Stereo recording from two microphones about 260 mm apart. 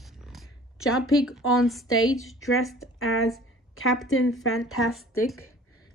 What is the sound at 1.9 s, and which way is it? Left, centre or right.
Speech, left.